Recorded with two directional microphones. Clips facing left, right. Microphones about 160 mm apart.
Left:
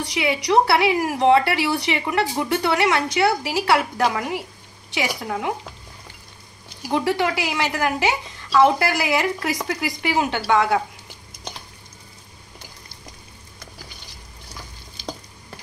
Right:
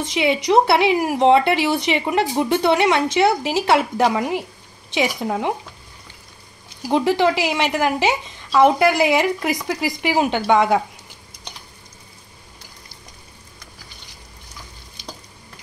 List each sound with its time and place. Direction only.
0.0 s speech: 25° right (ahead or behind)
6.9 s speech: 20° right (ahead or behind)